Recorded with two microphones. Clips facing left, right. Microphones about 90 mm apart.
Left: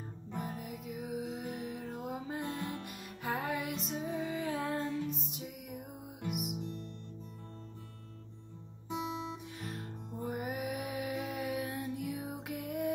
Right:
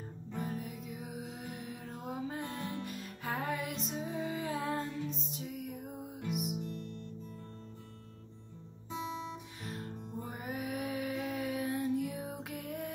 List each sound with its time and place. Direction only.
0.3 s music: 10° left (ahead or behind)
6.6 s music: 25° left (ahead or behind)
9.6 s music: centre (ahead or behind)